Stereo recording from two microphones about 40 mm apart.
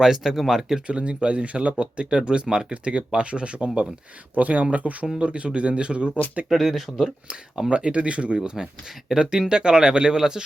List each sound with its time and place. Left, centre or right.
0.0 s speech: centre
0.9 s speech: right
5.0 s speech: right
6.5 s speech: centre
7.7 s speech: right
8.4 s speech: centre